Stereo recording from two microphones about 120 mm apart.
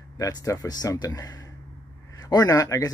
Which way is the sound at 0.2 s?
30° left (ahead or behind).